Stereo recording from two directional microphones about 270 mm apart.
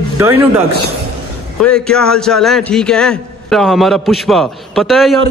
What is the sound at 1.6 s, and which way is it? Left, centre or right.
A man's voice, centre.